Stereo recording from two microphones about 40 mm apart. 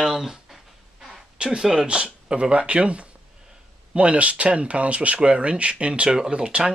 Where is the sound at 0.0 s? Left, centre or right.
Centre.